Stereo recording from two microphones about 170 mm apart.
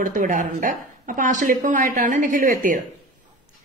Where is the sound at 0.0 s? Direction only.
50° right (ahead or behind).